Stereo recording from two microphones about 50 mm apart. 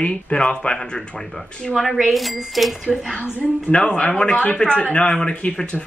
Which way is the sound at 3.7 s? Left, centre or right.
Left.